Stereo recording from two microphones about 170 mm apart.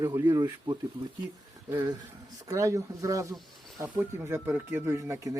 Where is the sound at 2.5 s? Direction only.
20° right (ahead or behind).